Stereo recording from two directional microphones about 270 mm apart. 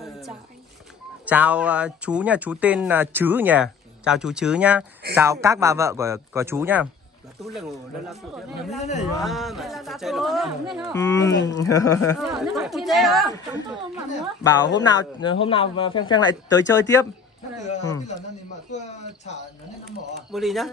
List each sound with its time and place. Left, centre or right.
1.2 s speech: centre
11.0 s speech: centre
12.2 s speech: centre
14.4 s speech: centre
17.6 s speech: left
20.2 s speech: centre